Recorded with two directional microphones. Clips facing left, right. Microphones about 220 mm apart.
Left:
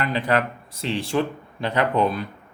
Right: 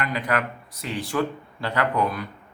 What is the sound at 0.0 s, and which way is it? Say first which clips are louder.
A man's voice: left 3 dB; 30° left (ahead or behind).